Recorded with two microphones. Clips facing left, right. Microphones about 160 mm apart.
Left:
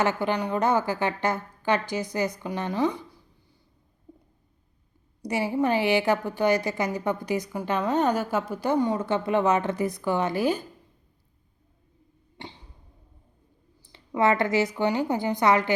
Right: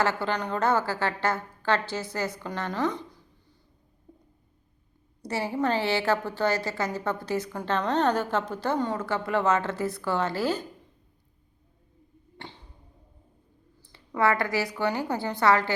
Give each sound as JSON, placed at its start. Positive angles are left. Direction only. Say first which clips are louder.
{"t": 0.0, "sound": "a woman's voice", "louder": "left 2 dB", "side_deg": 15}
{"t": 5.2, "sound": "a woman's voice", "louder": "left 3 dB", "side_deg": 15}
{"t": 12.4, "sound": "arrow", "louder": "left 2 dB", "side_deg": 15}
{"t": 13.8, "sound": "a woman's voice", "louder": "left 2 dB", "side_deg": 15}